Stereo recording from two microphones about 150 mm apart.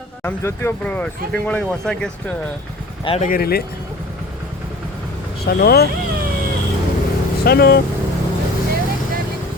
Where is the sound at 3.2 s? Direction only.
70° left (ahead or behind).